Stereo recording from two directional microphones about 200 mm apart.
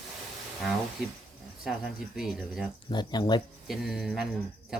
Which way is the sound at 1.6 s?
Centre (ahead or behind).